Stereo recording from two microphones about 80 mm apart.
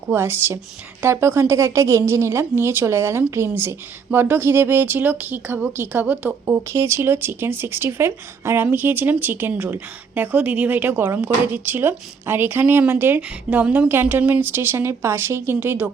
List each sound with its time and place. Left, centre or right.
0.1 s a woman's voice: right